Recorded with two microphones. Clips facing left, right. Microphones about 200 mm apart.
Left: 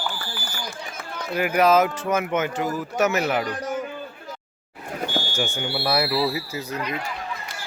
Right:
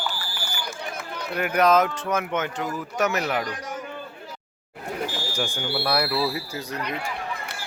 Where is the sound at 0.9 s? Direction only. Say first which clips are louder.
Even; 60° right (ahead or behind).